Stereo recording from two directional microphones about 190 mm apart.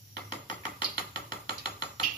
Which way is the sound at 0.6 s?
25° left (ahead or behind).